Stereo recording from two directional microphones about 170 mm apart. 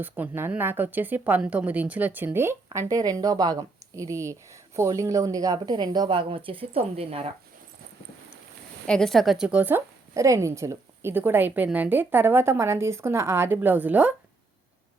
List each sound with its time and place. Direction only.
0.0 s a woman's voice: 10° right (ahead or behind); by 7.3 s 35° right (ahead or behind)
8.9 s a woman's voice: 5° left (ahead or behind)